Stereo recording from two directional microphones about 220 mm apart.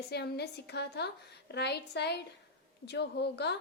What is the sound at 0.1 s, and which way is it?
A woman's voice, 50° left (ahead or behind).